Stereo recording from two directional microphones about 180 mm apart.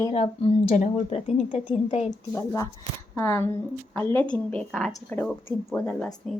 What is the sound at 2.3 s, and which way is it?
Speech, 20° left (ahead or behind).